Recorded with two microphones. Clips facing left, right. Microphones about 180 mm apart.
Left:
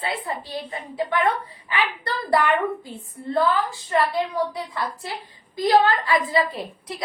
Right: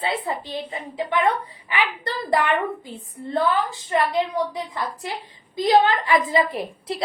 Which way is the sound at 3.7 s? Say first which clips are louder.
Even; 20° right (ahead or behind).